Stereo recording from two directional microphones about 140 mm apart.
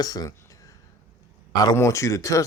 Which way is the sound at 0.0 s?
25° left (ahead or behind).